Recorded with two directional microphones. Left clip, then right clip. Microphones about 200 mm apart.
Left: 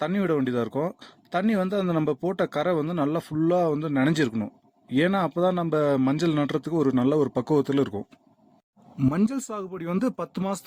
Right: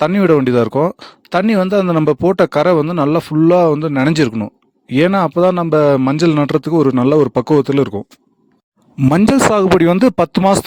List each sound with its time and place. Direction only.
0.0 s a man's voice: 50° right (ahead or behind)
9.0 s a man's voice: 50° right (ahead or behind)